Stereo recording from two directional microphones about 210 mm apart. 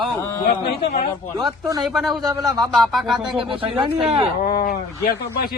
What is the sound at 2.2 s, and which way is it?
Speech, 15° right (ahead or behind).